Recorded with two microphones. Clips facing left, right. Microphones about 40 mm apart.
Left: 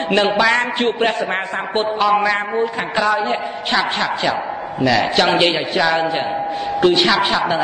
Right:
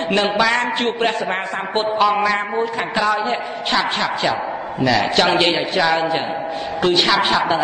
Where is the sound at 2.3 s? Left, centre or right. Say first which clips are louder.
Left 1 dB; left.